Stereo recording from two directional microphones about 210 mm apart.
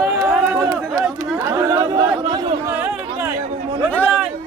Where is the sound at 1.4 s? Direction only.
10° right (ahead or behind).